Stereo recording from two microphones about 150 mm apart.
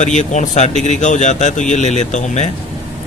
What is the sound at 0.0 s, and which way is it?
A man's voice, 50° left (ahead or behind).